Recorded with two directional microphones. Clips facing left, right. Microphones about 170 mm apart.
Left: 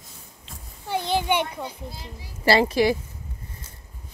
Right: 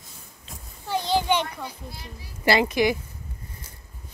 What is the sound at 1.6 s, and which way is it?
A child's voice, 25° left (ahead or behind).